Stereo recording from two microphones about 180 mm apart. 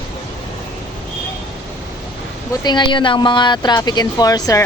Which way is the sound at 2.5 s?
25° left (ahead or behind).